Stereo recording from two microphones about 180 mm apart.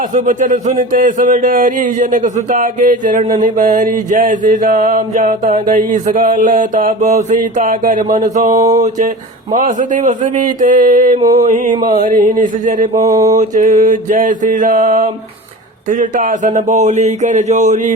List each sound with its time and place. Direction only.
0.1 s mantra: 45° right (ahead or behind)
11.2 s a sound: 20° right (ahead or behind)
11.4 s mantra: 45° right (ahead or behind)
11.7 s a sound: 25° right (ahead or behind)
11.9 s mantra: 50° right (ahead or behind)
13.0 s mantra: 15° right (ahead or behind)
13.5 s mantra: 50° right (ahead or behind)